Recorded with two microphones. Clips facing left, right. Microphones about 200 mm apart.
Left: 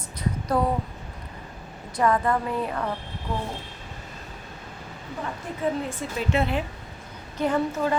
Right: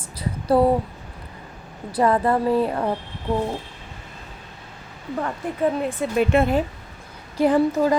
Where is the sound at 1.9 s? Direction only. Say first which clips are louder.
Right 4 dB; 35° right (ahead or behind).